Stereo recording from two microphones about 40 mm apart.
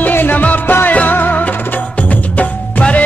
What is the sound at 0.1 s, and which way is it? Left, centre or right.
Music, left.